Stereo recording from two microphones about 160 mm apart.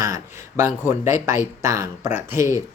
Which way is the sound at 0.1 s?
15° right (ahead or behind).